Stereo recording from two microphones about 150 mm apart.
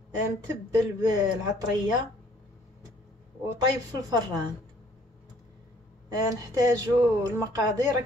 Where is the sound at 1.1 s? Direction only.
30° right (ahead or behind).